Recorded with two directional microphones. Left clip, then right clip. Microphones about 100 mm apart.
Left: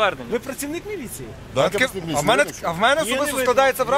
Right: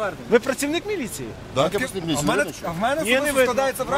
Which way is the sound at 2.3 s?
45° left (ahead or behind).